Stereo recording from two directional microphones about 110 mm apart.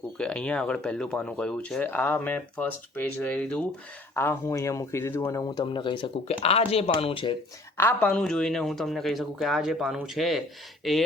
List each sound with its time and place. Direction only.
0.2 s speech: 10° left (ahead or behind)
5.4 s speech: 40° left (ahead or behind)
6.2 s speech: 65° left (ahead or behind)
7.8 s speech: 15° left (ahead or behind)
8.2 s speech: 5° left (ahead or behind)